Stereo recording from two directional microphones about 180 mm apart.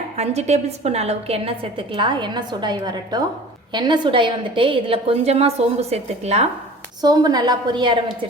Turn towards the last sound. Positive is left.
turn(degrees=-25)  # may be behind; listen again after turning